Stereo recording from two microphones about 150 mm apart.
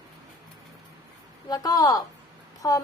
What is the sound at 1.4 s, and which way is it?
A woman's voice, 25° left (ahead or behind).